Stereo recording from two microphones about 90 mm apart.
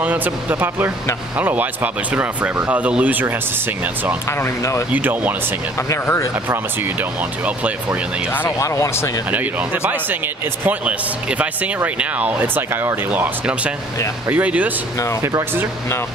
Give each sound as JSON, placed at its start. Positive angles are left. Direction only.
{"t": 0.0, "sound": "speech", "side_deg": -20}
{"t": 4.3, "sound": "speech", "side_deg": 30}
{"t": 4.9, "sound": "speech", "side_deg": -20}
{"t": 5.9, "sound": "speech", "side_deg": 30}
{"t": 6.5, "sound": "speech", "side_deg": -20}
{"t": 8.5, "sound": "speech", "side_deg": 35}
{"t": 9.3, "sound": "speech", "side_deg": -15}